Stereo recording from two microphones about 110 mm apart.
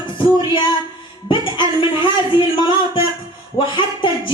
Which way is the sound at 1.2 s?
45° left (ahead or behind).